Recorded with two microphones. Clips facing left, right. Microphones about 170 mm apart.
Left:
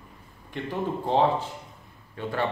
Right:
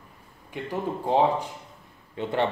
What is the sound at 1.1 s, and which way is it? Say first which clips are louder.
A man's voice: right 1 dB; 10° right (ahead or behind).